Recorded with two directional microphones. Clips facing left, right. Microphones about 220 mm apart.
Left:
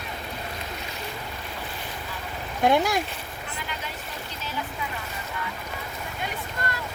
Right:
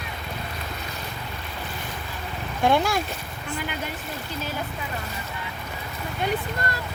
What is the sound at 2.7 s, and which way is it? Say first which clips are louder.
Speech: even; 20° left (ahead or behind).